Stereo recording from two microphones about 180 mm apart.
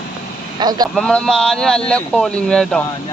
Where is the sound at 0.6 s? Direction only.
20° right (ahead or behind).